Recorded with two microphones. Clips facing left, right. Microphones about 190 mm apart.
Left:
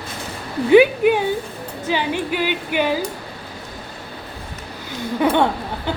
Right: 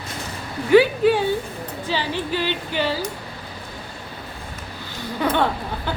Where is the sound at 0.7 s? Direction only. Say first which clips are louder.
Left 2 dB; 15° left (ahead or behind).